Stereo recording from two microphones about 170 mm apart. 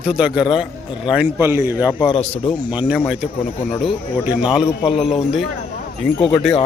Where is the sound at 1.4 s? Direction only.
15° right (ahead or behind).